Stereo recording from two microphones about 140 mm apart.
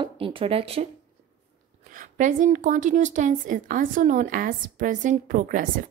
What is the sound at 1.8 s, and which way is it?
Speech, 70° right (ahead or behind).